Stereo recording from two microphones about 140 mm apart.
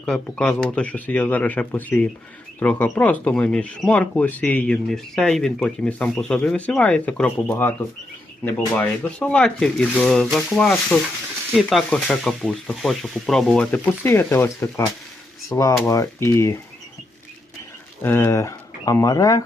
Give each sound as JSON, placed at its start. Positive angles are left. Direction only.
{"t": 0.0, "sound": "speech", "side_deg": 5}
{"t": 10.3, "sound": "rub", "side_deg": 5}
{"t": 15.4, "sound": "speech", "side_deg": 20}
{"t": 18.0, "sound": "speech", "side_deg": 15}